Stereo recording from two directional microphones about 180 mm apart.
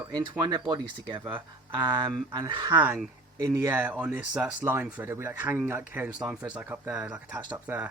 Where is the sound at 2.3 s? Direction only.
25° right (ahead or behind).